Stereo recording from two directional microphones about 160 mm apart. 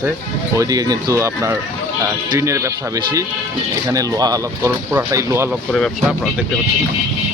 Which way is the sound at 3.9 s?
20° right (ahead or behind).